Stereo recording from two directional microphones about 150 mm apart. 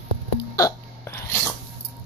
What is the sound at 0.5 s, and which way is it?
Hiccup, 20° left (ahead or behind).